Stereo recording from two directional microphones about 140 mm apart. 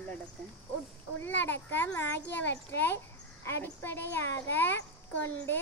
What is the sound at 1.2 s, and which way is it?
A child's voice, 15° left (ahead or behind).